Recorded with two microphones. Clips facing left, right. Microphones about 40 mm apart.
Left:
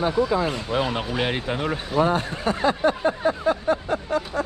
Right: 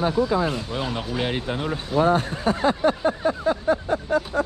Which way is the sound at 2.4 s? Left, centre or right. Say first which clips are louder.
Even; left.